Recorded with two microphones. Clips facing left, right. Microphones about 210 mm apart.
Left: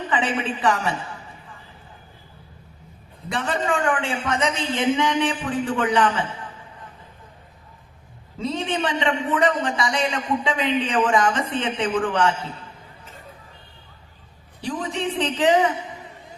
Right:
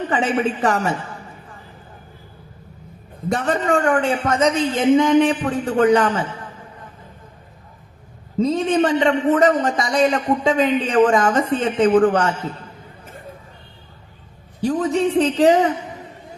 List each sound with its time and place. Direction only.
0.1 s a man's voice: 45° right (ahead or behind)
3.2 s a man's voice: 40° right (ahead or behind)
8.4 s a man's voice: 40° right (ahead or behind)
14.6 s a man's voice: 45° right (ahead or behind)